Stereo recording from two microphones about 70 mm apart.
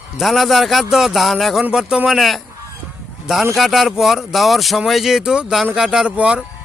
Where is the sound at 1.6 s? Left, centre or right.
Centre.